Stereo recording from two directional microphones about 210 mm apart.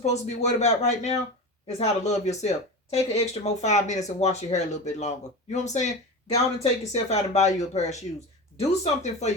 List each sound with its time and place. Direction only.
0.0 s speech: 30° left (ahead or behind)